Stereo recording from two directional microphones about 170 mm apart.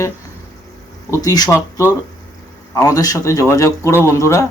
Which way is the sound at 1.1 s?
20° left (ahead or behind).